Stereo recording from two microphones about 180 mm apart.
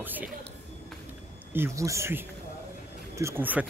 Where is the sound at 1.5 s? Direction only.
15° right (ahead or behind).